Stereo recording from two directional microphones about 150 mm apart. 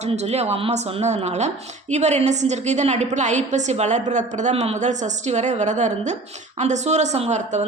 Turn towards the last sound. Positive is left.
turn(degrees=-50)  # may be behind; listen again after turning